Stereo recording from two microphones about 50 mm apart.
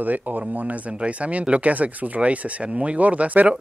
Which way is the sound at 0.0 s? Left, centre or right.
Right.